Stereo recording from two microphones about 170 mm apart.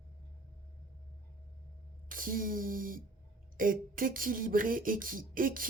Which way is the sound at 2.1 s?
55° right (ahead or behind).